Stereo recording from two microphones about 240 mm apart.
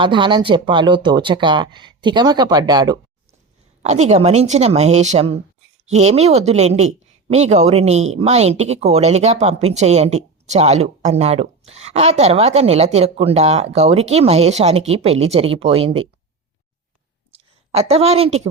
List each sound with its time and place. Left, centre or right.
0.0 s speech: centre
3.8 s speech: right
17.3 s a woman's voice: right